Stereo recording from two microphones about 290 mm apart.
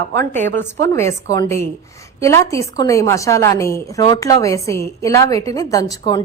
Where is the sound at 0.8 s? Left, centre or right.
Centre.